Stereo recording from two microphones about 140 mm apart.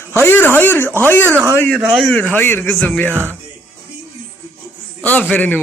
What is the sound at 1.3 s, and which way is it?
Speech, 15° right (ahead or behind).